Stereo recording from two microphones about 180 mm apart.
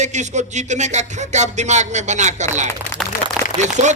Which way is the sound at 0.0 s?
40° right (ahead or behind).